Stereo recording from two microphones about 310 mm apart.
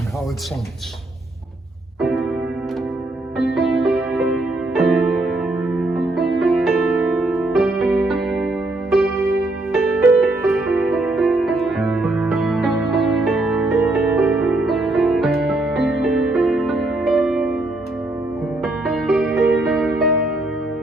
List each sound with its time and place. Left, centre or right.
2.0 s keyboard: centre
3.3 s music: centre
18.6 s music: centre